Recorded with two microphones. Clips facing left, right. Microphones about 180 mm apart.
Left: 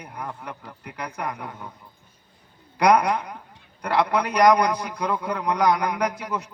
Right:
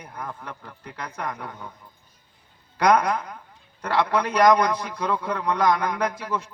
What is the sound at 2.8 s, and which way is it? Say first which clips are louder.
A man's voice: left 1 dB; 15° left (ahead or behind).